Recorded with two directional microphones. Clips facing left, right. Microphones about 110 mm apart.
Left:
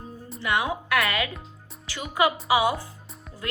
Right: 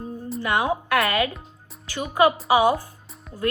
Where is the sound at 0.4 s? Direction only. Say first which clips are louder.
Right 3 dB; 40° right (ahead or behind).